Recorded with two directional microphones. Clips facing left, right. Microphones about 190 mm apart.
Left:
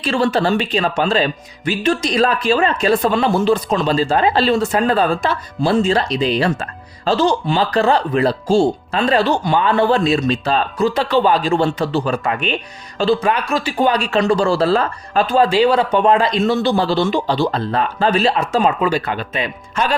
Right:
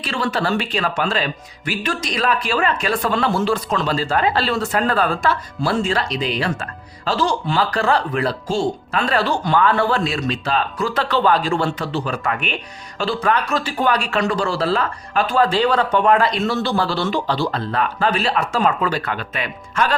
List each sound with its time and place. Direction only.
0.0 s speech: 25° left (ahead or behind)
10.9 s speech: 15° left (ahead or behind); by 15.2 s 35° left (ahead or behind)
15.4 s speech: 15° left (ahead or behind)